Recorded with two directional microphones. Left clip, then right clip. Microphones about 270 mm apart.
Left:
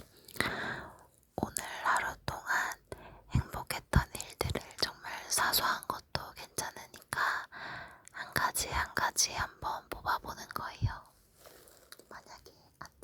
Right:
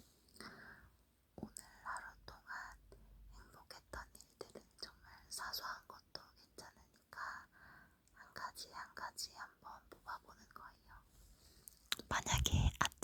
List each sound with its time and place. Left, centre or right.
0.4 s sigh: left
1.4 s whispering: left
12.0 s whispering: right